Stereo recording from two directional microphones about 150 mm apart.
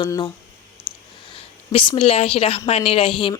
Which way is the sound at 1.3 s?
40° left (ahead or behind).